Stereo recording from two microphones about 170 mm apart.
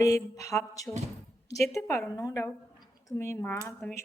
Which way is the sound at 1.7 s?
15° left (ahead or behind).